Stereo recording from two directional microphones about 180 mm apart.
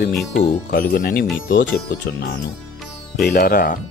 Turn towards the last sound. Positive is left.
turn(degrees=50)  # may be behind; listen again after turning